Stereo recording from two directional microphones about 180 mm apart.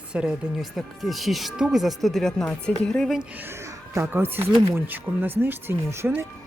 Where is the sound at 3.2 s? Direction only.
15° right (ahead or behind).